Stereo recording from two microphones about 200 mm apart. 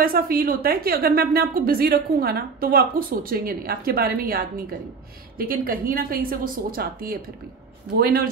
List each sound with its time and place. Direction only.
0.0 s a woman's voice: 45° right (ahead or behind)